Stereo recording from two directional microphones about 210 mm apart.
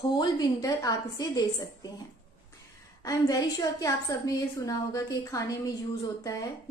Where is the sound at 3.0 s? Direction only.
15° left (ahead or behind).